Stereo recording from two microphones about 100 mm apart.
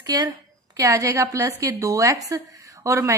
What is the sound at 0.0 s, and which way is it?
A woman's voice, 35° right (ahead or behind).